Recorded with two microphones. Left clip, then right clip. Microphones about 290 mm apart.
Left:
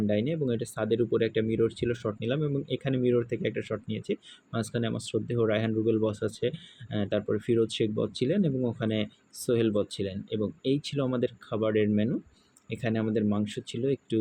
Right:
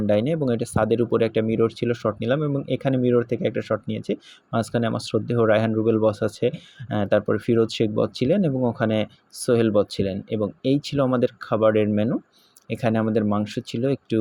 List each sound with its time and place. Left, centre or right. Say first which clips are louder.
0.1 s speech: right 10 dB; right